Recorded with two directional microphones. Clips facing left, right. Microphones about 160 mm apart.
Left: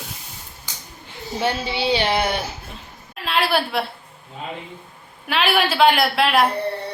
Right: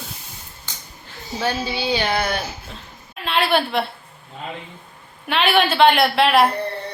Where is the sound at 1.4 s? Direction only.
25° left (ahead or behind).